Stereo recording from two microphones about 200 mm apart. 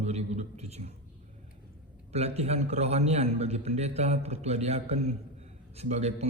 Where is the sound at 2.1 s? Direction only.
30° right (ahead or behind).